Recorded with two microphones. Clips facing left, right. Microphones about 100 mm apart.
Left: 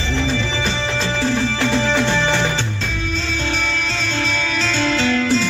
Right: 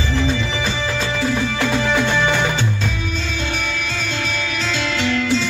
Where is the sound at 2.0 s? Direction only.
30° left (ahead or behind).